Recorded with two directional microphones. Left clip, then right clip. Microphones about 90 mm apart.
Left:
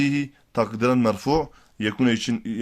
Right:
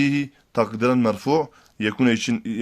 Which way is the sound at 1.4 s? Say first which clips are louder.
Right 2 dB; 25° right (ahead or behind).